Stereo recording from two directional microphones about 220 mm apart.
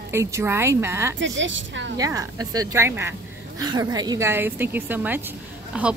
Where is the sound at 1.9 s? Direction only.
15° right (ahead or behind).